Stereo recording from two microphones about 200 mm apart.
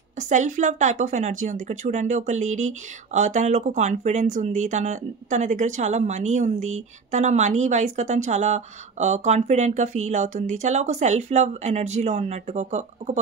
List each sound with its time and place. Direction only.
0.3 s speech: 40° right (ahead or behind)